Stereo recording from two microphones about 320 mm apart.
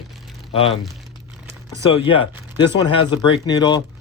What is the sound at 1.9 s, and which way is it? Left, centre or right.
Speech, centre.